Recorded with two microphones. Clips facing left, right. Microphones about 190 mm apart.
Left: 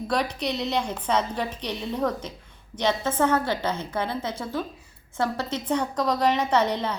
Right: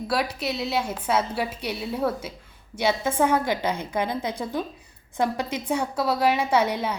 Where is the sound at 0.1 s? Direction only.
5° right (ahead or behind).